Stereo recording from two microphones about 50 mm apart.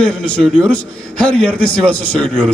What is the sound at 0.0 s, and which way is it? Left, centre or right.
A man's voice, left.